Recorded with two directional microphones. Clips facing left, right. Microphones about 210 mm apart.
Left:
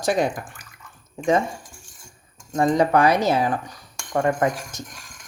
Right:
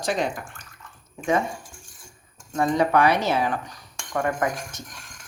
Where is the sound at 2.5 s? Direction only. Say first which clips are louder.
Left 2 dB; 40° left (ahead or behind).